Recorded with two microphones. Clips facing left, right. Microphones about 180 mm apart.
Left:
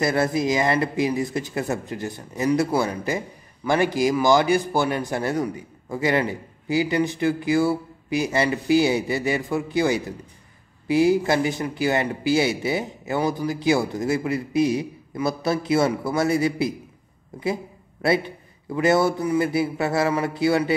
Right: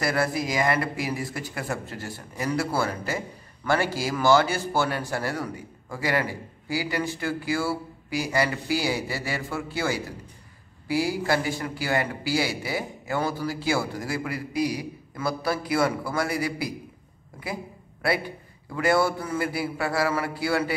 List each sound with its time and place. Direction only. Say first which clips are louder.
0.0 s a man's voice: left 4 dB; 20° left (ahead or behind)
18.0 s a man's voice: left 5 dB; 25° left (ahead or behind)